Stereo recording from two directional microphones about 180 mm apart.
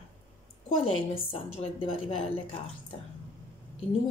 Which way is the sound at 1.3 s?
30° left (ahead or behind).